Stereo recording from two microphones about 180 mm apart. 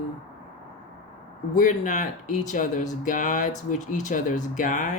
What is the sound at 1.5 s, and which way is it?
Speech, 45° left (ahead or behind).